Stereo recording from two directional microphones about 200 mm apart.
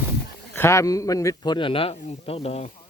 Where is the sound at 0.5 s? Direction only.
15° left (ahead or behind); by 2.7 s 35° left (ahead or behind).